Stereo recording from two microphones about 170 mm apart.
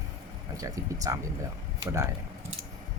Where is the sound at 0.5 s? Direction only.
20° right (ahead or behind).